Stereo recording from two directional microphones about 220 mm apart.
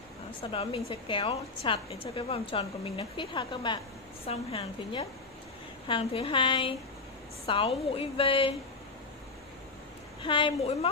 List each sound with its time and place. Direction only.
0.4 s a woman's voice: 25° left (ahead or behind)
10.2 s a woman's voice: 20° left (ahead or behind)